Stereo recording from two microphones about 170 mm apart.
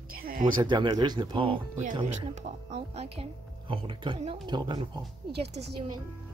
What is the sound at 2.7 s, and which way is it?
A woman's voice, 35° right (ahead or behind).